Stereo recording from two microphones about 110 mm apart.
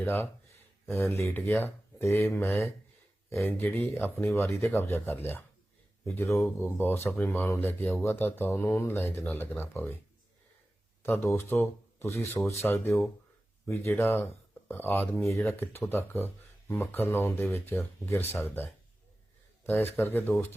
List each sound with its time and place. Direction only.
0.0 s speech: 20° left (ahead or behind)
11.0 s speech: 20° left (ahead or behind)